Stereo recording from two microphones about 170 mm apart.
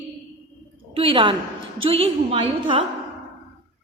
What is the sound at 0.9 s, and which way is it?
A woman's voice, 30° right (ahead or behind).